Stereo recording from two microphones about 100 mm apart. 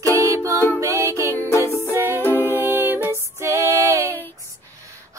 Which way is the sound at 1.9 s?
25° right (ahead or behind).